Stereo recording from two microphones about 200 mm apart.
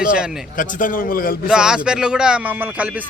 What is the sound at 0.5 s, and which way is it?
Speech, 45° left (ahead or behind).